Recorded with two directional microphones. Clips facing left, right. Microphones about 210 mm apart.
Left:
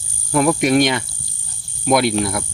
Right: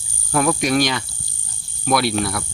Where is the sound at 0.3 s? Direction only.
20° left (ahead or behind).